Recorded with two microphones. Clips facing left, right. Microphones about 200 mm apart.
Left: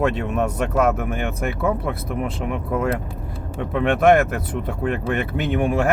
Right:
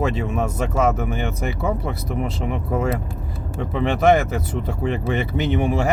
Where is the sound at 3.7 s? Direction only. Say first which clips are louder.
Left 1 dB; 55° left (ahead or behind).